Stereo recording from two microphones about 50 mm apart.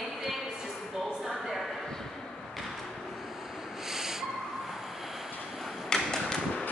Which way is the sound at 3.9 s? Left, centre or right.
Centre.